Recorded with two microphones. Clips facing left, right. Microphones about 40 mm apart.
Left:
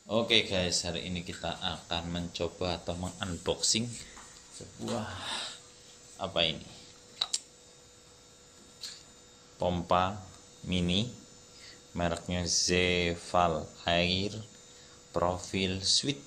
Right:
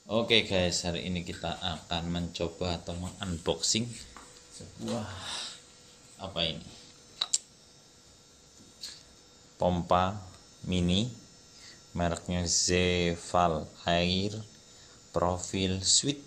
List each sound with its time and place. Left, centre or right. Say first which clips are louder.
0.0 s speech: right 1 dB; centre
2.8 s speech: left 3 dB; left
3.2 s speech: right 3 dB; centre
7.2 s a sound: even; centre
9.6 s speech: right 2 dB; centre